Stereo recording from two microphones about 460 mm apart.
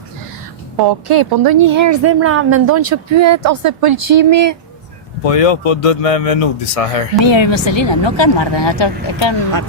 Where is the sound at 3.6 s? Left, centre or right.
Right.